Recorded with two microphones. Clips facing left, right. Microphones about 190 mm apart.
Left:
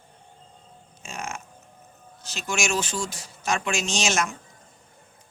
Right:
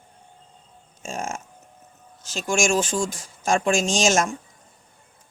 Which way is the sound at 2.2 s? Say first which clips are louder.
Right 6 dB; 45° right (ahead or behind).